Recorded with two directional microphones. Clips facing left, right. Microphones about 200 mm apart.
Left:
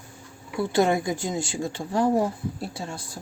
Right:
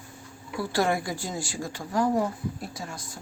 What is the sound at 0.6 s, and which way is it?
A woman's voice, 20° left (ahead or behind).